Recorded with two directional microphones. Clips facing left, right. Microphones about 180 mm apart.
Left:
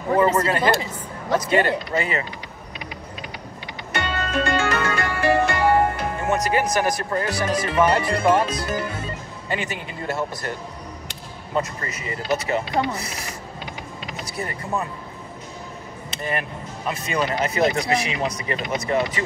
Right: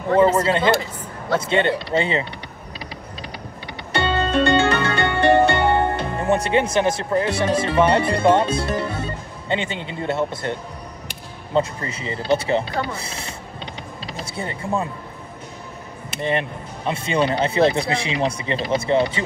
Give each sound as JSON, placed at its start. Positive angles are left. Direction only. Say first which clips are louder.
{"t": 0.2, "sound": "speech", "louder": "right 3 dB", "side_deg": -25}
{"t": 3.9, "sound": "music", "louder": "right 5 dB", "side_deg": -30}
{"t": 11.5, "sound": "speech", "louder": "right 4 dB", "side_deg": -25}
{"t": 14.0, "sound": "a sound", "louder": "right 1 dB", "side_deg": -30}
{"t": 16.2, "sound": "speech", "louder": "right 5 dB", "side_deg": -25}